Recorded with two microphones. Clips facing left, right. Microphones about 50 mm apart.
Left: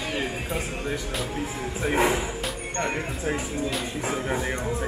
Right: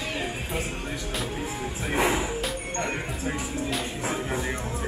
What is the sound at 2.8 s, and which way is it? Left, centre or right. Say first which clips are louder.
Speech: left 5 dB; centre.